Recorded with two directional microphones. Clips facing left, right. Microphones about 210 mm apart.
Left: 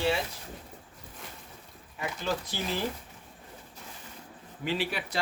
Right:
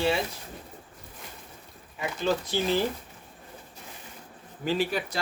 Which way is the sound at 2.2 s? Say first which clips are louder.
Right 7 dB; 25° right (ahead or behind).